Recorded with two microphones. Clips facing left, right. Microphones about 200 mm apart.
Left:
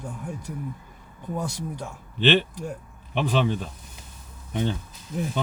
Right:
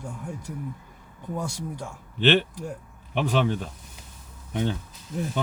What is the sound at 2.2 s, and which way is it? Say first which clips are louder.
Speech: even; 45° right (ahead or behind).